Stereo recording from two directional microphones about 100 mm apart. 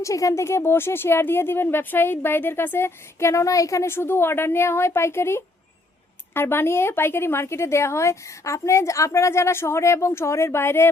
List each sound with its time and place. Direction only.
0.0 s speech: 35° left (ahead or behind)